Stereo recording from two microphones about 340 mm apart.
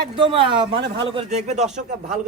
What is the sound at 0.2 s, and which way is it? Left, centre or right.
Speech, centre.